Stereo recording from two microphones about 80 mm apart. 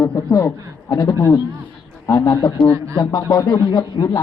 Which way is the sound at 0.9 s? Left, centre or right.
Left.